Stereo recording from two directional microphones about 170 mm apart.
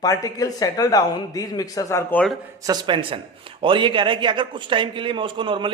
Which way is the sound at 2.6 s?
30° right (ahead or behind).